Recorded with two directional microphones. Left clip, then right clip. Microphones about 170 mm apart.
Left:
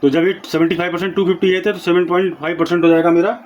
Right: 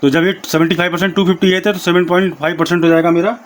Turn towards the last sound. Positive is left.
turn(degrees=-60)  # may be behind; listen again after turning